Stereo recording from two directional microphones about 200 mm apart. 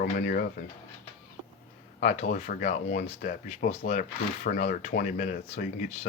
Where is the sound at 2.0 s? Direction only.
35° left (ahead or behind).